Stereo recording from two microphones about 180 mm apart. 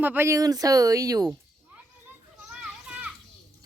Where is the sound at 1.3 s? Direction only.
5° right (ahead or behind).